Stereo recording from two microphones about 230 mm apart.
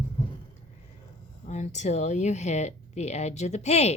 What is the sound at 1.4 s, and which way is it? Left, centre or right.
A woman's voice, left.